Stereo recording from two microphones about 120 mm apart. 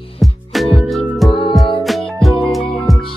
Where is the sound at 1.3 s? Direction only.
45° left (ahead or behind).